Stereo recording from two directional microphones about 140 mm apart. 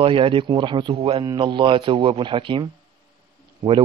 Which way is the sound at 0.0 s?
40° right (ahead or behind).